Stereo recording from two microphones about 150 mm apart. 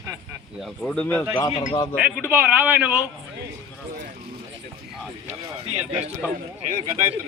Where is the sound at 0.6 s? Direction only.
5° left (ahead or behind).